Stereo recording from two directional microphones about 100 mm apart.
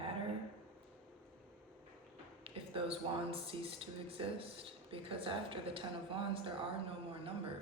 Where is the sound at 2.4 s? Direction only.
70° right (ahead or behind).